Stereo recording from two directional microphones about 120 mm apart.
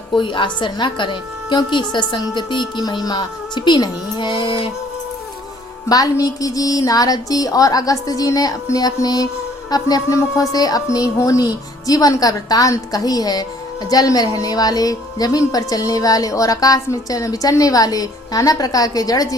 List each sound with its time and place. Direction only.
0.1 s a woman's voice: 40° left (ahead or behind)
5.9 s a woman's voice: 30° left (ahead or behind)